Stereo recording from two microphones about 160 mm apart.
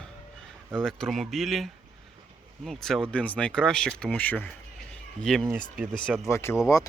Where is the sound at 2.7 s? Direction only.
Centre (ahead or behind).